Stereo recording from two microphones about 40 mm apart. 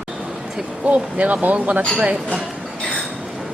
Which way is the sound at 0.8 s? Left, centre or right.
Right.